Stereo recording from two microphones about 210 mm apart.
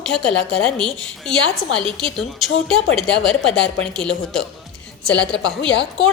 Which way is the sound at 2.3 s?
Centre (ahead or behind).